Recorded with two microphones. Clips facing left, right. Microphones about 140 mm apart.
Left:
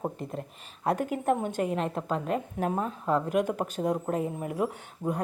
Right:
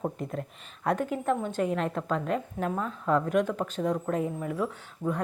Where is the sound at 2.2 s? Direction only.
45° left (ahead or behind).